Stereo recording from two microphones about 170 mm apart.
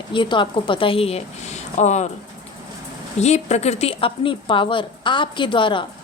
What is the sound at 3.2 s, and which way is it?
A woman's voice, 40° left (ahead or behind).